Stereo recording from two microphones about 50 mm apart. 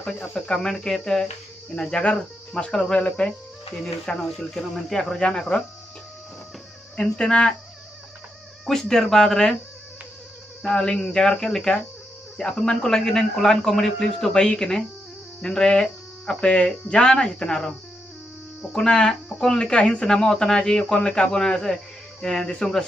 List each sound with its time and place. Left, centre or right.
0.3 s speech: centre
3.8 s speech: centre
7.0 s speech: centre
8.6 s speech: centre
10.7 s speech: centre